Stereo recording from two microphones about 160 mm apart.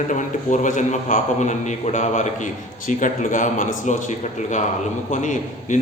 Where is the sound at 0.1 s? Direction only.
50° left (ahead or behind).